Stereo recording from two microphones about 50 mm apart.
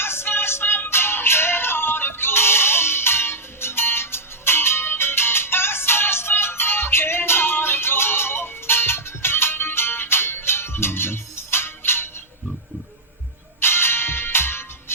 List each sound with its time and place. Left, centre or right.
0.0 s music: left
13.6 s music: left